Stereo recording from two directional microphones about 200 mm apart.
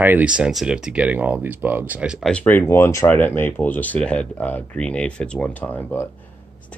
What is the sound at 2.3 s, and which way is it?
Speech, 10° left (ahead or behind).